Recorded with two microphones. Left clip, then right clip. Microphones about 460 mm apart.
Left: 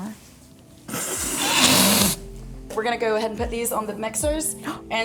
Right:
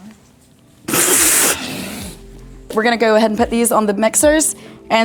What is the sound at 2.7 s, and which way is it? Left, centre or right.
A woman's voice, right.